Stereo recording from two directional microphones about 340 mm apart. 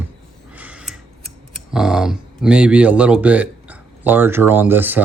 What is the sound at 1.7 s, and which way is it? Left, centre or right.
Speech, centre.